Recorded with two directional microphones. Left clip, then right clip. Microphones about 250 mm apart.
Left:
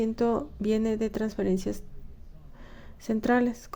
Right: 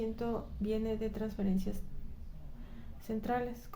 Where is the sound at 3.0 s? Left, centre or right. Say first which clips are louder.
Left 10 dB; left.